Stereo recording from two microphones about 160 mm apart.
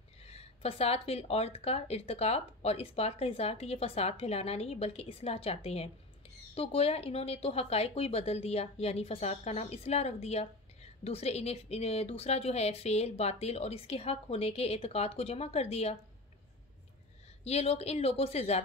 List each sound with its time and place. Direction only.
0.2 s speech: 40° left (ahead or behind)
17.4 s speech: 40° left (ahead or behind)